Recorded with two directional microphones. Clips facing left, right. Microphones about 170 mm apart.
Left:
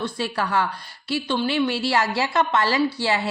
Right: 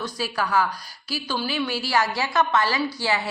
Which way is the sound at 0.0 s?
30° left (ahead or behind).